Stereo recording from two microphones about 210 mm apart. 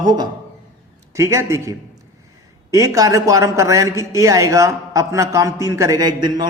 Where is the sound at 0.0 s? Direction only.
20° right (ahead or behind).